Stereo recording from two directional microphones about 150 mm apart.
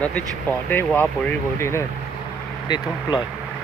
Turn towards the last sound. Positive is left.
turn(degrees=30)  # may be behind; listen again after turning